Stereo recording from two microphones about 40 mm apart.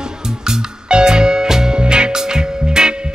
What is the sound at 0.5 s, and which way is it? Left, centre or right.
Music, centre.